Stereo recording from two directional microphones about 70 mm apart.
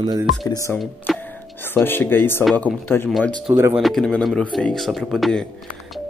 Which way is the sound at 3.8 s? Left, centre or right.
Centre.